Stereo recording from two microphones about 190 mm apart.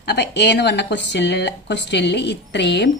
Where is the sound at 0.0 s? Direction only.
60° left (ahead or behind).